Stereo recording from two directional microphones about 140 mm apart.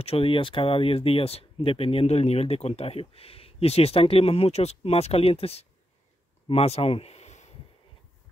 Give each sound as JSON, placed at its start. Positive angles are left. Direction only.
{"t": 0.0, "sound": "speech", "side_deg": 45}